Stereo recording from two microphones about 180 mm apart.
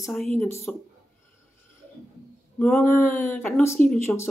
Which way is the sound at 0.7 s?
5° left (ahead or behind).